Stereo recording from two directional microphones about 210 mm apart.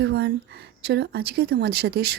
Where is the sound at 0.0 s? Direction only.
50° right (ahead or behind).